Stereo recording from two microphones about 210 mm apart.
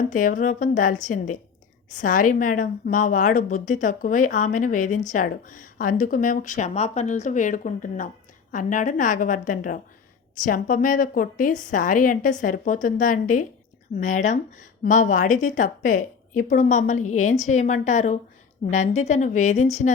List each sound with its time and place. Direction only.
0.1 s a woman's voice: 40° left (ahead or behind)